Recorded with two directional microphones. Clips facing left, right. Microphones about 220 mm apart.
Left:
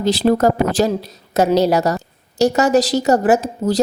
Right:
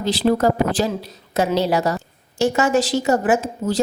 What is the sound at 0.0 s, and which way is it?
A woman's voice, 45° left (ahead or behind).